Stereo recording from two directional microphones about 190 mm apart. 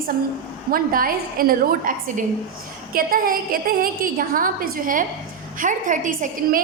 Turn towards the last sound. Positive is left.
turn(degrees=-40)  # may be behind; listen again after turning